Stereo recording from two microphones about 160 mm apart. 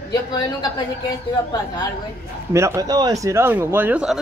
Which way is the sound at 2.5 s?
15° right (ahead or behind).